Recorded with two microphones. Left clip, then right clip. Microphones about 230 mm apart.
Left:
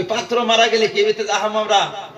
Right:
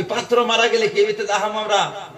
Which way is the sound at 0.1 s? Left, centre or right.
Left.